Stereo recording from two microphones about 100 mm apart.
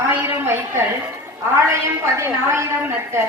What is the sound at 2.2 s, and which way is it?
Speech, 25° right (ahead or behind).